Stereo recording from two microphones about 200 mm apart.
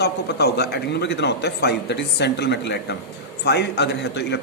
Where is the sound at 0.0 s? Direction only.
55° left (ahead or behind).